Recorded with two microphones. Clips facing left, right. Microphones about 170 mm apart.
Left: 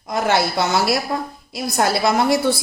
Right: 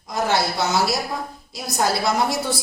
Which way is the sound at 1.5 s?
65° left (ahead or behind).